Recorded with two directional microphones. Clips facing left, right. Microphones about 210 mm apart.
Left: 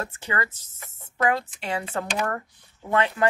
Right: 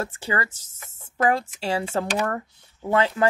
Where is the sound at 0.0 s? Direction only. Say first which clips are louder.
Right 2 dB; 30° right (ahead or behind).